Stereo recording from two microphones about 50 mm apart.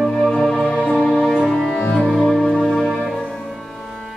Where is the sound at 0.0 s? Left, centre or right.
Centre.